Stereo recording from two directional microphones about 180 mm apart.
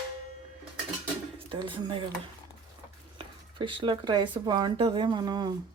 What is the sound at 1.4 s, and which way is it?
Speech, 25° right (ahead or behind).